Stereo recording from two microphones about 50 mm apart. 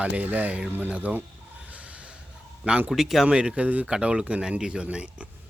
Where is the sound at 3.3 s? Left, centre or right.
Right.